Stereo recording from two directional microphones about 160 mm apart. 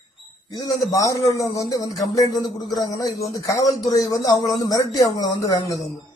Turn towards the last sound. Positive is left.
turn(degrees=20)  # may be behind; listen again after turning